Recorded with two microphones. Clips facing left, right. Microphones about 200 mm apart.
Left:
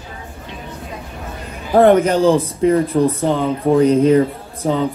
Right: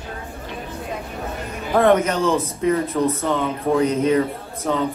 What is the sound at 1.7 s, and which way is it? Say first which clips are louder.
Speech: left 5 dB; 30° left (ahead or behind).